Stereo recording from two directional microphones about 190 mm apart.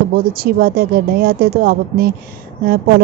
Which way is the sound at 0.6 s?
50° right (ahead or behind).